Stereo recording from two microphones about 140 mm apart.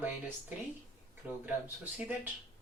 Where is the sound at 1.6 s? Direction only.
10° right (ahead or behind).